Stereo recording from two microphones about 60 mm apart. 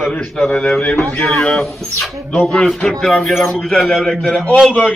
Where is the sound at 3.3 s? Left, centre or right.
Centre.